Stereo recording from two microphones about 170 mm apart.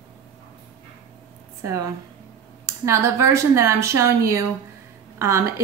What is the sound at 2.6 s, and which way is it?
A woman's voice, 15° right (ahead or behind).